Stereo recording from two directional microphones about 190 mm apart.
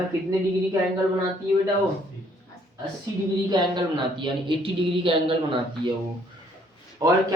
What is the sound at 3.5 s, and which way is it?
A man's voice, 25° right (ahead or behind).